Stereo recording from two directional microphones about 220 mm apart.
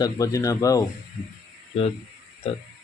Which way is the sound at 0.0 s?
15° left (ahead or behind).